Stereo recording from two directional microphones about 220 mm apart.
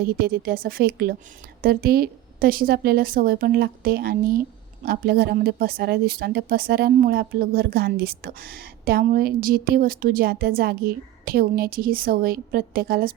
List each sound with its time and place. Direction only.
0.0 s a woman's voice: 40° right (ahead or behind)